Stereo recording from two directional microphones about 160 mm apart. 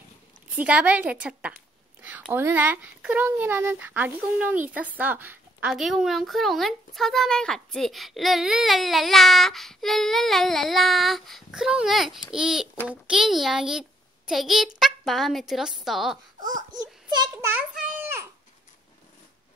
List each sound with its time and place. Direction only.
0.6 s a woman's voice: 10° right (ahead or behind)
17.1 s a child's voice: 25° right (ahead or behind)